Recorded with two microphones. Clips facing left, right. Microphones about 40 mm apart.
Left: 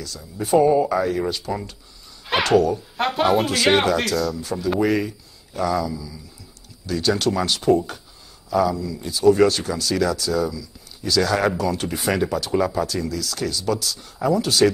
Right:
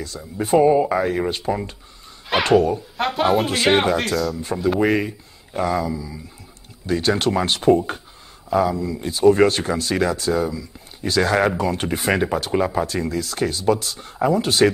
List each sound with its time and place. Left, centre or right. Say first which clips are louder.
0.0 s speech: right 3 dB; right
2.3 s speech: right 1 dB; centre
3.4 s speech: even; centre
4.4 s speech: right 2 dB; right